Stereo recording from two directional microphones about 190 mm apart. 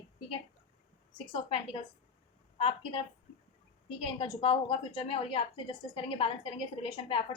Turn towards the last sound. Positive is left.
turn(degrees=30)  # may be behind; listen again after turning